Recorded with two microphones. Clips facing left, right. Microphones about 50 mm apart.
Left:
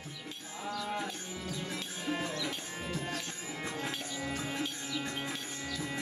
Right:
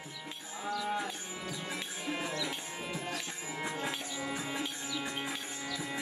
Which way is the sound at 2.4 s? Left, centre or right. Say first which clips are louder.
Even; right.